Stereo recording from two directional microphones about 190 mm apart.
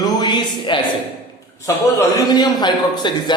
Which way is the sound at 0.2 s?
25° left (ahead or behind).